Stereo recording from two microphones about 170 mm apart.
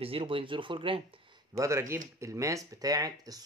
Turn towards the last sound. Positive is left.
turn(degrees=-20)  # may be behind; listen again after turning